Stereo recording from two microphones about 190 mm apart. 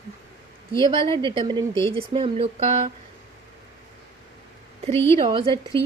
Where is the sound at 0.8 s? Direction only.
25° right (ahead or behind).